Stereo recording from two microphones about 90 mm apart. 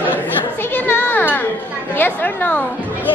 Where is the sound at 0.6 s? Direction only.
25° left (ahead or behind).